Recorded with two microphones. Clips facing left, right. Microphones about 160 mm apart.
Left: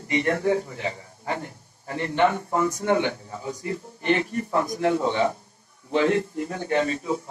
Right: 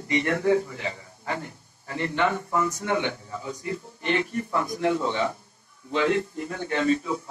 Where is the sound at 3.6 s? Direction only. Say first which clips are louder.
Left 1 dB; 45° left (ahead or behind).